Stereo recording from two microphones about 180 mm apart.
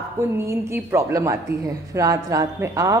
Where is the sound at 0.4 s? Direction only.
15° right (ahead or behind).